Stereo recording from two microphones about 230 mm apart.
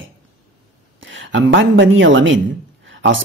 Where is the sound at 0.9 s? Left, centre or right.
Right.